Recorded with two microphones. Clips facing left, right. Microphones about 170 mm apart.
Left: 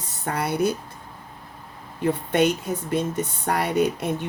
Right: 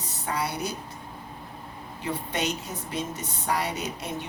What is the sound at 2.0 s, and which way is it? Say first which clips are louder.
Speech: left 9 dB; 50° left (ahead or behind).